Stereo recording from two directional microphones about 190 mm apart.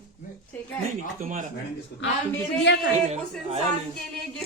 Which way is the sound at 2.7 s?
75° left (ahead or behind).